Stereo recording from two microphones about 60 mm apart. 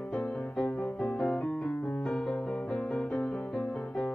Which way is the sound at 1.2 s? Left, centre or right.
Left.